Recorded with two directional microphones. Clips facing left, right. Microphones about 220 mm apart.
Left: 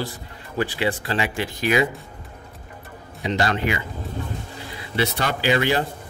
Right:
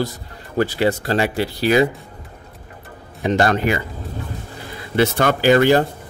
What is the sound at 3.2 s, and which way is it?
Speech, 50° right (ahead or behind).